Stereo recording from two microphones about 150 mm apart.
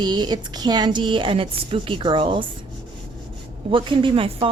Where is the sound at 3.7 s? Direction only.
35° right (ahead or behind).